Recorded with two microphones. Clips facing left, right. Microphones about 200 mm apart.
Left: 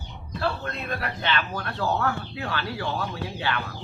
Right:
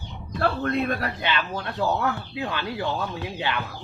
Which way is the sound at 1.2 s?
20° right (ahead or behind).